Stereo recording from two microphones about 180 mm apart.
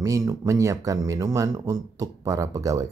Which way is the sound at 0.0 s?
20° right (ahead or behind).